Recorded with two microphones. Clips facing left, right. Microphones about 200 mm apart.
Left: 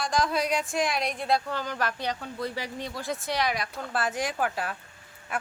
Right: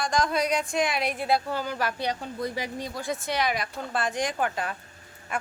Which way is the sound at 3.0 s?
Centre (ahead or behind).